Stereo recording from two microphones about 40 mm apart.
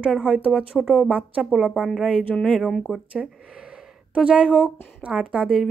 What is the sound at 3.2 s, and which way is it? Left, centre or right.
Speech, centre.